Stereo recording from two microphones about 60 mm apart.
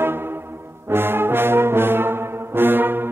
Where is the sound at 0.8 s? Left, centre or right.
Right.